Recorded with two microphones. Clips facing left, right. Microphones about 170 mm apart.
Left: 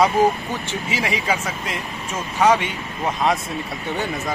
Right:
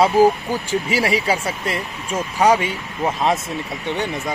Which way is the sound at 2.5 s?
10° right (ahead or behind).